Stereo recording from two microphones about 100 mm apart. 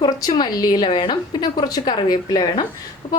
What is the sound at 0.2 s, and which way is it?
A woman's voice, 45° left (ahead or behind).